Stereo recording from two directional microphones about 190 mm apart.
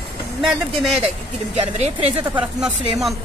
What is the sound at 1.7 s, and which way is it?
Speech, 35° right (ahead or behind).